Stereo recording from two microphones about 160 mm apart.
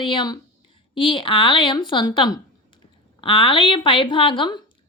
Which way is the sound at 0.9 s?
30° left (ahead or behind).